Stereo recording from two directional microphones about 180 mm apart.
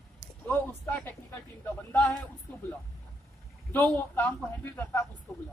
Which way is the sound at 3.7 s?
5° left (ahead or behind).